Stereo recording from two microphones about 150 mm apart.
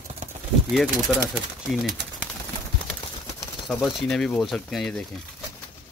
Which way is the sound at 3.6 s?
5° left (ahead or behind).